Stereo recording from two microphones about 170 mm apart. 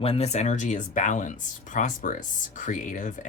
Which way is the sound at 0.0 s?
35° left (ahead or behind).